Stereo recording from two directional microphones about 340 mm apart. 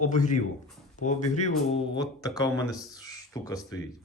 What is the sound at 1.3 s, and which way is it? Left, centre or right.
Mantra, centre.